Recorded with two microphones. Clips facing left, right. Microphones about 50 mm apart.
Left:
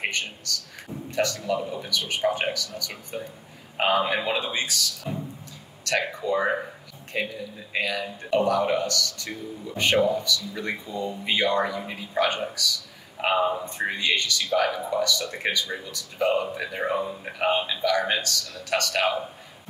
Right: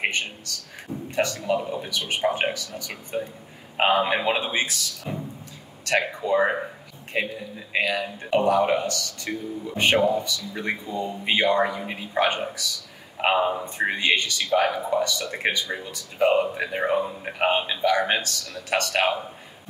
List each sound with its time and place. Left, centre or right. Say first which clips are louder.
1.1 s speech: right 1 dB; right
5.9 s speech: right 2 dB; right